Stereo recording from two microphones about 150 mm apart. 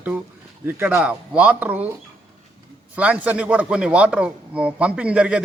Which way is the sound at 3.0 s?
10° right (ahead or behind).